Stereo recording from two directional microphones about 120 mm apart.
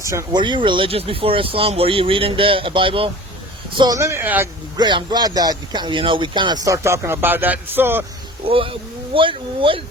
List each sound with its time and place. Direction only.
0.0 s speech: 25° right (ahead or behind)
0.3 s speech: 40° right (ahead or behind)
3.9 s speech: 20° right (ahead or behind)
4.8 s speech: 40° right (ahead or behind)
6.7 s speech: 25° right (ahead or behind)
8.4 s speech: 50° right (ahead or behind)